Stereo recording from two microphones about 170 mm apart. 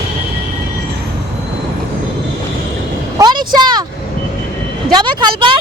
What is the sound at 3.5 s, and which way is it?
Speech, 25° right (ahead or behind).